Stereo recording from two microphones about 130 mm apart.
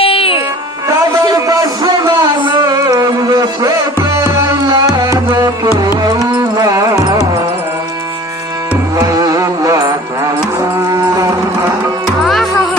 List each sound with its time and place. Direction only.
0.0 s music: 45° left (ahead or behind)
0.9 s a sound: 30° right (ahead or behind)
6.0 s music: 30° right (ahead or behind)
9.0 s music: 25° right (ahead or behind)
12.2 s music: centre (ahead or behind)